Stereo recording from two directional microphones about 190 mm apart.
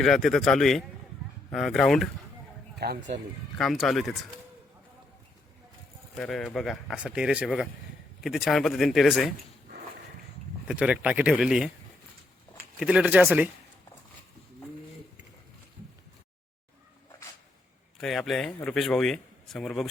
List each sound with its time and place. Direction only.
0.0 s speech: centre (ahead or behind)
2.7 s speech: 60° right (ahead or behind)
3.6 s speech: centre (ahead or behind)
6.1 s speech: centre (ahead or behind)
10.7 s speech: 5° right (ahead or behind)
12.8 s speech: 5° right (ahead or behind)
17.9 s speech: centre (ahead or behind)